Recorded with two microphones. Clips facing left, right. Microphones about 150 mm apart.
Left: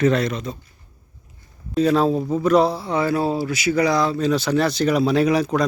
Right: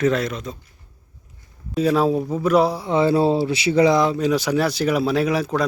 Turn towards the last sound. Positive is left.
turn(degrees=-5)  # may be behind; listen again after turning